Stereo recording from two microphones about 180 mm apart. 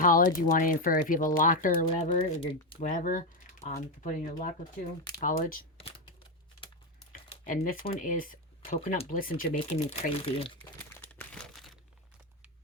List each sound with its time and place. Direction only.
0.0 s speech: 50° left (ahead or behind)
2.1 s speech: 30° left (ahead or behind)
2.9 s speech: 50° left (ahead or behind)
7.4 s speech: 50° left (ahead or behind)
8.7 s speech: 40° left (ahead or behind)
9.6 s speech: 30° left (ahead or behind)
11.1 s a sound: 5° left (ahead or behind)